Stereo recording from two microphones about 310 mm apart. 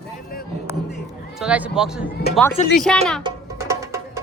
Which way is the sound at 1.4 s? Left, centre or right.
Centre.